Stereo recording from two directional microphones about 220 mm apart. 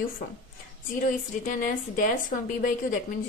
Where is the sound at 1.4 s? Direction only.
35° left (ahead or behind).